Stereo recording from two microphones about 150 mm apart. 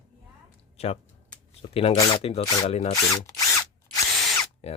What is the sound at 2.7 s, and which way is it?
Speech, 45° left (ahead or behind).